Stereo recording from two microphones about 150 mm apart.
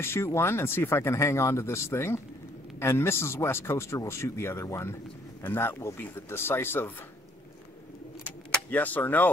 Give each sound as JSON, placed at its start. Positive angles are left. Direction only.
{"t": 0.0, "sound": "speech", "side_deg": 15}
{"t": 8.6, "sound": "speech", "side_deg": 10}